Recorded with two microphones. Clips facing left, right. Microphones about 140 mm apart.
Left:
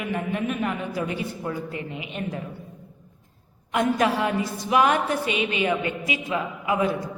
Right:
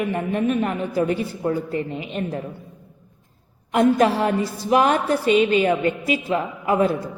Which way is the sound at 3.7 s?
40° right (ahead or behind).